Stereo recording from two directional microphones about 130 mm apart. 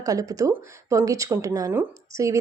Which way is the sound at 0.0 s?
25° right (ahead or behind).